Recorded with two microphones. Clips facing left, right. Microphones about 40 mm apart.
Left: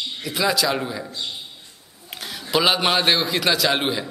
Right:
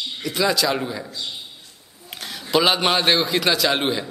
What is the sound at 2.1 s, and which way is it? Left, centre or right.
A man's voice, centre.